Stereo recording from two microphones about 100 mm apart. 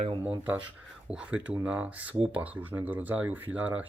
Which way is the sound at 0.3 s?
20° right (ahead or behind).